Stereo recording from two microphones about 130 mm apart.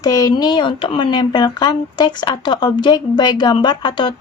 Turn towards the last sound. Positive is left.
turn(degrees=40)  # may be behind; listen again after turning